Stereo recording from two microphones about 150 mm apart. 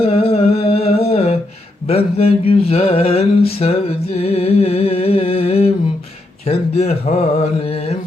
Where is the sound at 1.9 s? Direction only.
45° left (ahead or behind).